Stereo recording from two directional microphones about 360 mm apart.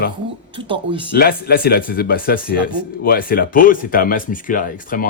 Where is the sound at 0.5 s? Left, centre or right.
Centre.